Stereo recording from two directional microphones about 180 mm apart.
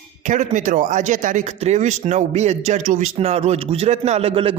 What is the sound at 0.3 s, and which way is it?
Speech, 45° right (ahead or behind).